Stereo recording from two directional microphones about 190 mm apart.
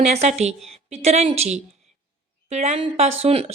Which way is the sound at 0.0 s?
35° right (ahead or behind).